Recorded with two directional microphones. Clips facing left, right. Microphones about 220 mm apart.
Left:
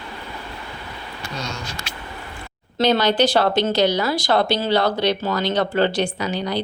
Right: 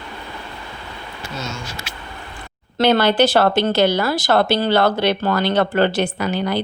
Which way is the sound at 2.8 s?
55° right (ahead or behind).